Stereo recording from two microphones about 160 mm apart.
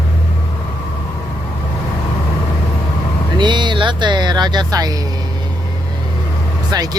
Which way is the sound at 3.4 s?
30° right (ahead or behind).